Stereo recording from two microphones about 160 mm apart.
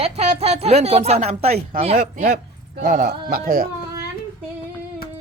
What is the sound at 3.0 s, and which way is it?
Speech, 70° right (ahead or behind).